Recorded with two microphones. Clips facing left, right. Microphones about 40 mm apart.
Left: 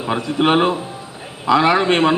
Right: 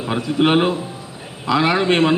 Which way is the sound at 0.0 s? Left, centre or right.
Centre.